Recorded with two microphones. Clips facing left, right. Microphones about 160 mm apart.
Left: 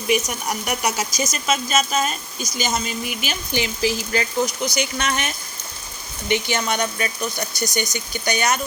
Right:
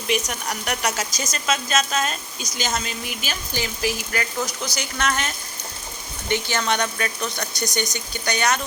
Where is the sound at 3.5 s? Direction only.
25° left (ahead or behind).